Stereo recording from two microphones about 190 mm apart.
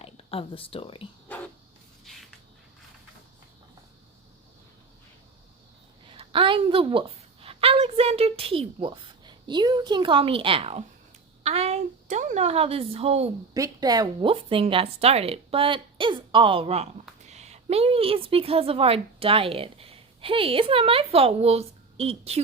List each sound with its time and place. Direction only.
0.0 s speech: 30° left (ahead or behind)
6.1 s a sound: 30° right (ahead or behind)
7.4 s a woman's voice: 30° right (ahead or behind)
13.5 s speech: 20° right (ahead or behind)